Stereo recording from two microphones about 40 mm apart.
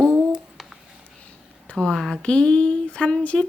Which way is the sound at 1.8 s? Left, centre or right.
Centre.